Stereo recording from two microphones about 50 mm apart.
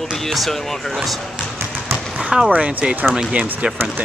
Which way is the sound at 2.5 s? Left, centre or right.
Right.